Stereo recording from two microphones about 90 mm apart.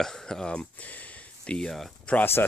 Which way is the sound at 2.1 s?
25° left (ahead or behind).